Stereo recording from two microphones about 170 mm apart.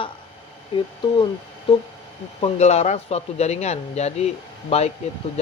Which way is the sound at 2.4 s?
40° left (ahead or behind).